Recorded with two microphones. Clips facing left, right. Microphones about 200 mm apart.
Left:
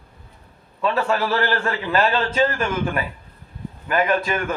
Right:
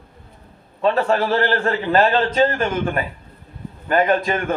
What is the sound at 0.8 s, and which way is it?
Speech, 35° right (ahead or behind).